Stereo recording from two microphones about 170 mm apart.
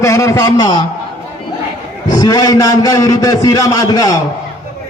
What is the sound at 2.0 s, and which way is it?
A man's voice, 20° left (ahead or behind).